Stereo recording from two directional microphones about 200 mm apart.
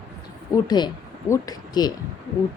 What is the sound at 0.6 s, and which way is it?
Speech, 20° left (ahead or behind).